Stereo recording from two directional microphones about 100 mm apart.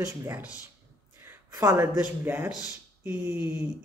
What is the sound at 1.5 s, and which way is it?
Speech, 30° right (ahead or behind).